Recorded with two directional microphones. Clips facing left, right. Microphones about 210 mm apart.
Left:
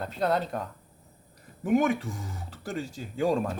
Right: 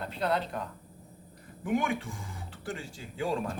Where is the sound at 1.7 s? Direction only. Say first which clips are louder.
Left 6 dB; 40° left (ahead or behind).